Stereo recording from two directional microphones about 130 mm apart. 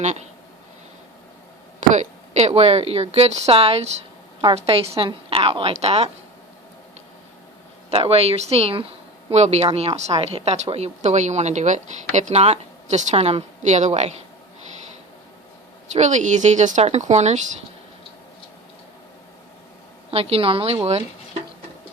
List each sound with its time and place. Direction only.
0.0 s a woman's voice: 60° right (ahead or behind)
1.9 s a woman's voice: 60° right (ahead or behind)
7.9 s a woman's voice: 50° right (ahead or behind)
15.9 s a woman's voice: 65° right (ahead or behind)
20.1 s a woman's voice: 50° right (ahead or behind)